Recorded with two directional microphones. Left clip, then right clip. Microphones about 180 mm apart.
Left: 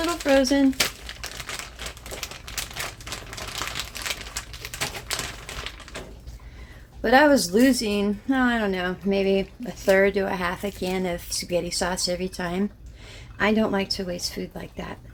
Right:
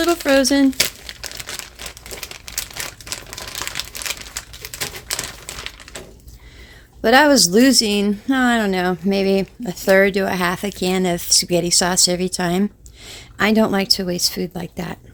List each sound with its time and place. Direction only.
0.0 s speech: 60° right (ahead or behind)
3.2 s typewriter: 25° right (ahead or behind)
4.6 s a sound: 25° right (ahead or behind)
7.0 s speech: 60° right (ahead or behind)